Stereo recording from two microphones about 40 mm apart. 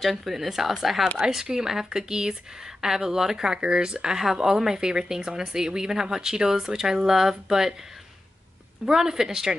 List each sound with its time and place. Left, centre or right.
0.0 s speech: centre
1.2 s a woman's voice: centre
8.8 s a woman's voice: centre